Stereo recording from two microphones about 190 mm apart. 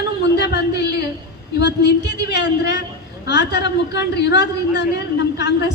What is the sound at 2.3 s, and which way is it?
A man's voice, 65° left (ahead or behind).